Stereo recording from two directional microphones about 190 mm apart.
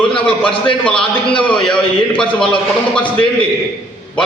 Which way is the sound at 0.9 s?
25° left (ahead or behind).